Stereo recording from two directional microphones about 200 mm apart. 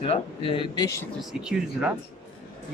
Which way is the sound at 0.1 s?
25° left (ahead or behind).